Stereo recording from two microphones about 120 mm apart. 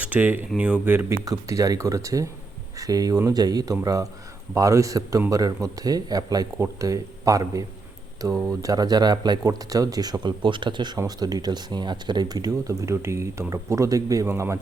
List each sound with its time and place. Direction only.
0.0 s speech: 15° right (ahead or behind)
1.2 s speech: 30° right (ahead or behind)